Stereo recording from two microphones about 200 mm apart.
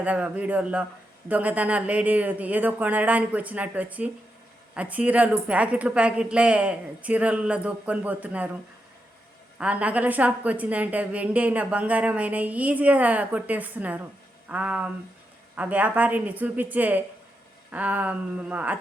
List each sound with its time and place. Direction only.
0.0 s a woman's voice: 5° right (ahead or behind)
9.6 s a woman's voice: 5° right (ahead or behind)